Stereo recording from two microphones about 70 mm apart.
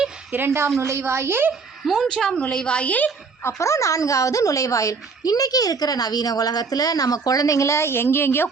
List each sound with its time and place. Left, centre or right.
0.3 s a woman's voice: right
1.8 s a woman's voice: centre
2.5 s a woman's voice: centre
3.4 s a woman's voice: left